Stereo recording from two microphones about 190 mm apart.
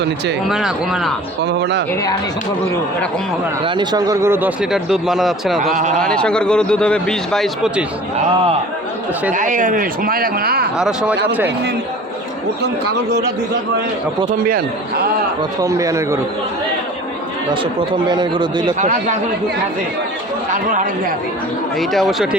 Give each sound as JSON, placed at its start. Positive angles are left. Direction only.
{"t": 0.4, "sound": "a man's voice", "side_deg": 0}
{"t": 1.5, "sound": "speech", "side_deg": -60}
{"t": 3.6, "sound": "speech", "side_deg": -20}
{"t": 5.7, "sound": "a man's voice", "side_deg": -40}
{"t": 6.0, "sound": "a man's voice", "side_deg": 5}
{"t": 9.3, "sound": "speech", "side_deg": -45}
{"t": 10.8, "sound": "a man's voice", "side_deg": -5}
{"t": 14.3, "sound": "speech", "side_deg": -50}
{"t": 15.6, "sound": "speech", "side_deg": -15}
{"t": 17.5, "sound": "speech", "side_deg": -25}
{"t": 18.8, "sound": "a man's voice", "side_deg": -40}
{"t": 21.8, "sound": "a man's voice", "side_deg": 0}